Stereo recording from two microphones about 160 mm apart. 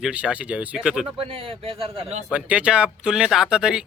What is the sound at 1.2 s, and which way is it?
A man's voice, 35° right (ahead or behind).